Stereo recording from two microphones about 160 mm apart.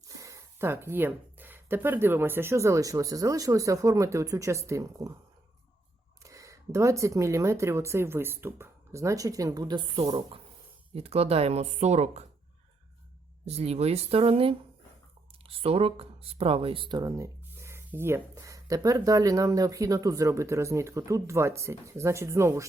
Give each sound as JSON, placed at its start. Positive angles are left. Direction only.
{"t": 0.2, "sound": "speech", "side_deg": -20}
{"t": 6.2, "sound": "speech", "side_deg": -20}
{"t": 10.9, "sound": "speech", "side_deg": -40}
{"t": 13.4, "sound": "speech", "side_deg": -40}